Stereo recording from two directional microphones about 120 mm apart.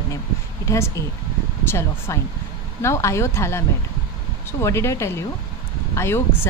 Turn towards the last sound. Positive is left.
turn(degrees=20)  # may be behind; listen again after turning